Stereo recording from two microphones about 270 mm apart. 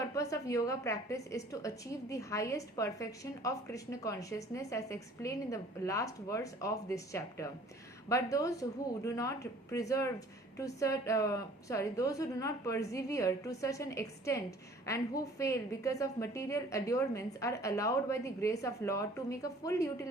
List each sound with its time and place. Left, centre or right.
0.1 s a woman's voice: centre